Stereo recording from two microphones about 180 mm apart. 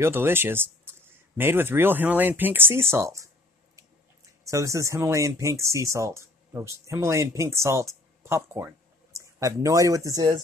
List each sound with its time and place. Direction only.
0.0 s speech: 15° right (ahead or behind)
4.5 s speech: 15° right (ahead or behind)